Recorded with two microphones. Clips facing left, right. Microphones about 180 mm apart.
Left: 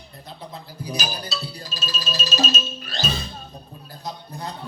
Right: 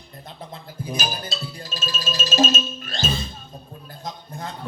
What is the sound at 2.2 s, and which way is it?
Music, 50° right (ahead or behind).